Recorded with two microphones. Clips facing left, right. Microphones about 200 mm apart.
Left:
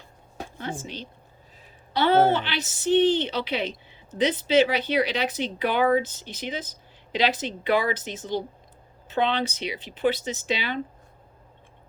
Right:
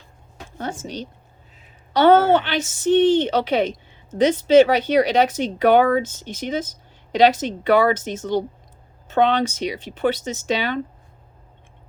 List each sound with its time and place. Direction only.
0.6 s a woman's voice: 45° right (ahead or behind)